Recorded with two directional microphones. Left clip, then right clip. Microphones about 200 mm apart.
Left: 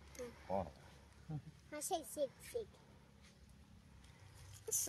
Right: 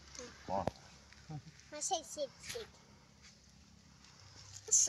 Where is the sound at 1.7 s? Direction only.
70° left (ahead or behind).